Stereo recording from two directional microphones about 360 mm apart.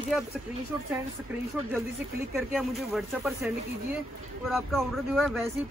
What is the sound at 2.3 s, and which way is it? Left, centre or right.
Speech, centre.